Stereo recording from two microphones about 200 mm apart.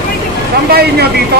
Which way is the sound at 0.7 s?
50° right (ahead or behind).